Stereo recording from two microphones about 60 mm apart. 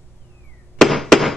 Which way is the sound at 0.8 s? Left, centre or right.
Centre.